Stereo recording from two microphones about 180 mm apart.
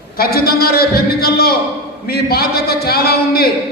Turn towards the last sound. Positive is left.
turn(degrees=60)  # may be behind; listen again after turning